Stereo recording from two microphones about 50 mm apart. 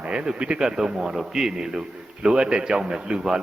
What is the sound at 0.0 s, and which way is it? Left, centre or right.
A man's voice, right.